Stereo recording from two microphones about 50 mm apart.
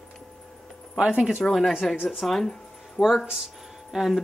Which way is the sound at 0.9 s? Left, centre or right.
Centre.